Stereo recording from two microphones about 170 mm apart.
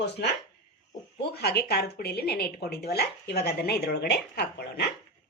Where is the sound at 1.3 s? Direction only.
70° left (ahead or behind).